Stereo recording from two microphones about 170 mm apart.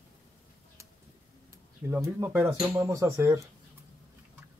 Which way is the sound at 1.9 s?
15° right (ahead or behind).